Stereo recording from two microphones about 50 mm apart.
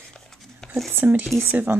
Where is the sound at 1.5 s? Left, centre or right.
Right.